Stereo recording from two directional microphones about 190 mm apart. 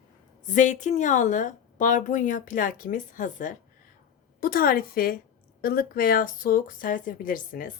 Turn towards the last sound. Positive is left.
turn(degrees=45)  # may be behind; listen again after turning